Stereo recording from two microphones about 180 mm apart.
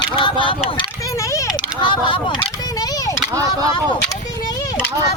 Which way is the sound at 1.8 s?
30° left (ahead or behind).